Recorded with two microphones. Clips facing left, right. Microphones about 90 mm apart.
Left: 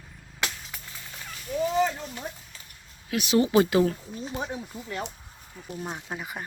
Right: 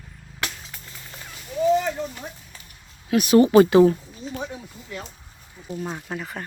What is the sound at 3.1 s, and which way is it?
Speech, 50° right (ahead or behind).